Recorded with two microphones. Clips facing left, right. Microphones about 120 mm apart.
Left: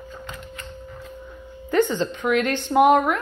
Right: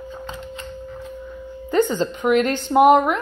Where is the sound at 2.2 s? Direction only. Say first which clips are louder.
Right 4 dB; 25° right (ahead or behind).